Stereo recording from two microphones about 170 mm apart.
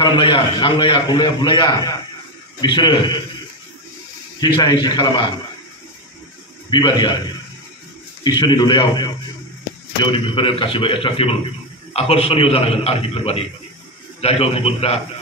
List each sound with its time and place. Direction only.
0.0 s a man's voice: 30° left (ahead or behind)
4.6 s a man's voice: 25° left (ahead or behind)
6.7 s a man's voice: 25° left (ahead or behind)
8.2 s a man's voice: 25° left (ahead or behind)
10.1 s a man's voice: 30° left (ahead or behind)